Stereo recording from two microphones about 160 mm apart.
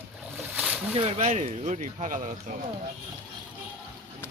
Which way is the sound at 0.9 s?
40° right (ahead or behind).